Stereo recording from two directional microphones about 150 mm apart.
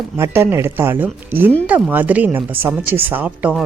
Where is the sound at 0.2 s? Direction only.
15° right (ahead or behind).